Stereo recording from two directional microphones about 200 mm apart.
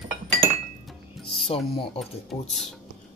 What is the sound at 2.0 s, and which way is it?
Speech, centre (ahead or behind).